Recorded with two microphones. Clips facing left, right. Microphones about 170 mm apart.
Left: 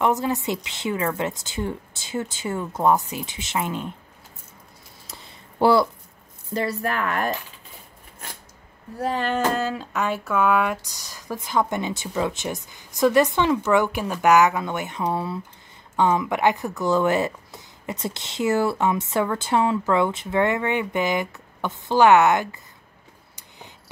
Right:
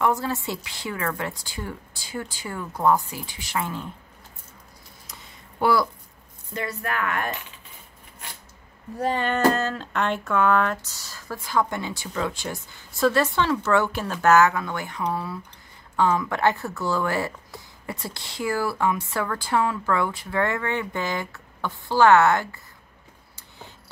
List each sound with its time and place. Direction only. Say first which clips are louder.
0.0 s speech: left 2 dB; 20° left (ahead or behind)
5.0 s a sound: left 3 dB; 30° left (ahead or behind)
6.5 s speech: left 4 dB; 35° left (ahead or behind)
8.9 s speech: even; centre (ahead or behind); by 22.6 s 15° left (ahead or behind)